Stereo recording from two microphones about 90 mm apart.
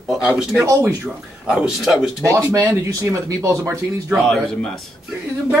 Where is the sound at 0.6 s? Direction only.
35° right (ahead or behind).